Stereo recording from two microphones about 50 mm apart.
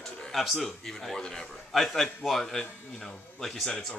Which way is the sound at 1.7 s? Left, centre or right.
Centre.